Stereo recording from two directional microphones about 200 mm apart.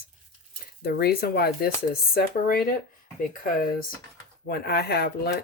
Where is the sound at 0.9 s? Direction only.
50° left (ahead or behind).